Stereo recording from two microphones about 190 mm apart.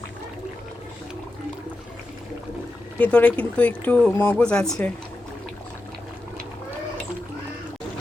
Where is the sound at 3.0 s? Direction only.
10° left (ahead or behind).